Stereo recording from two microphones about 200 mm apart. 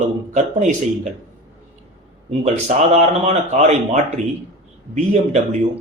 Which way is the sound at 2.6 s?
35° right (ahead or behind).